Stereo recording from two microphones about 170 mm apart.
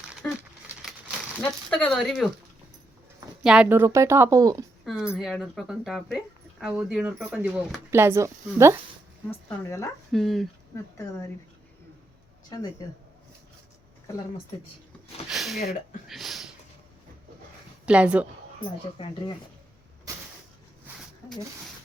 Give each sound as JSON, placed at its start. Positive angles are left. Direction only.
{"t": 0.2, "sound": "crumpling", "side_deg": 10}
{"t": 1.5, "sound": "speech", "side_deg": 5}
{"t": 3.4, "sound": "speech", "side_deg": -5}
{"t": 4.9, "sound": "speech", "side_deg": -5}
{"t": 9.3, "sound": "speech", "side_deg": 15}
{"t": 10.1, "sound": "speech", "side_deg": 0}
{"t": 12.8, "sound": "speech", "side_deg": 20}
{"t": 15.3, "sound": "speech", "side_deg": 0}
{"t": 15.6, "sound": "speech", "side_deg": 50}
{"t": 16.0, "sound": "speech", "side_deg": 0}
{"t": 17.8, "sound": "speech", "side_deg": -5}
{"t": 19.0, "sound": "speech", "side_deg": 30}